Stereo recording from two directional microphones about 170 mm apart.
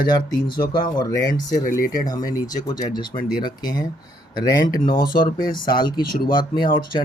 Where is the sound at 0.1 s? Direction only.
25° left (ahead or behind).